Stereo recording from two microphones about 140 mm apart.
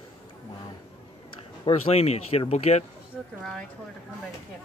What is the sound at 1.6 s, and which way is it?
Speech, 45° left (ahead or behind).